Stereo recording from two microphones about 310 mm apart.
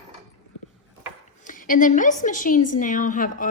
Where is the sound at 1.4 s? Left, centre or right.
Left.